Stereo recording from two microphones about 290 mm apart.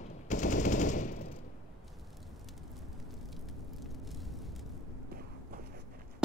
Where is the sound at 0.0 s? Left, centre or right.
Left.